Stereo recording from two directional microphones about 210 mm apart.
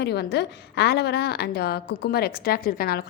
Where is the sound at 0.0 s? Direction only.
50° left (ahead or behind).